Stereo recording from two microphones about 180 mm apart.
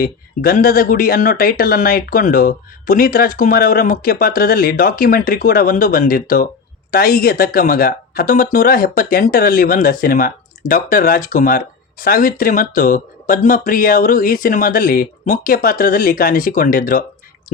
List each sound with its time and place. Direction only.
0.0 s speech: 55° left (ahead or behind)